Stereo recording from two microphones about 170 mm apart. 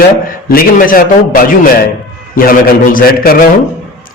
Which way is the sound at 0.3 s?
55° left (ahead or behind).